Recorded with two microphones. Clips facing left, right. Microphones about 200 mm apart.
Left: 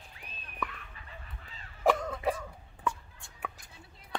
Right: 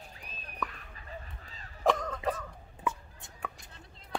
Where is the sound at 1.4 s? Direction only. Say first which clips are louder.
Right 1 dB; 40° right (ahead or behind).